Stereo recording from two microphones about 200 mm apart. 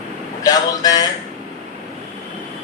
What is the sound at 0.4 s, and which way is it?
Speech, 20° left (ahead or behind).